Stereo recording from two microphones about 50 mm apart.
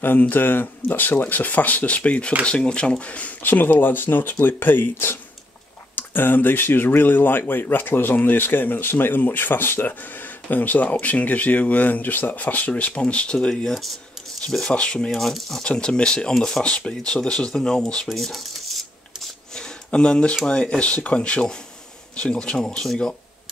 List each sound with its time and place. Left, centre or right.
0.0 s speech: left
3.4 s speech: left
10.5 s speech: left; by 15.0 s centre
15.1 s speech: centre
15.6 s speech: left
16.3 s speech: centre
16.6 s speech: centre
18.1 s cutlery: centre
19.5 s a sound: centre
20.4 s speech: centre